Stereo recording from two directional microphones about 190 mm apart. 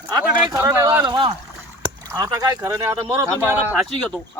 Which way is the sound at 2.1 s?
20° right (ahead or behind).